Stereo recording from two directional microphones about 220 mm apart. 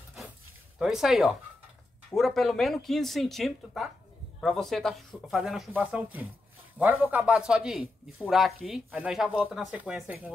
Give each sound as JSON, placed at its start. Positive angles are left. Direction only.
{"t": 0.7, "sound": "a man's voice", "side_deg": -5}